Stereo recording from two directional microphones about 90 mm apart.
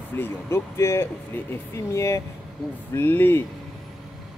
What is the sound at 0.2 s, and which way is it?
A man's voice, 30° left (ahead or behind).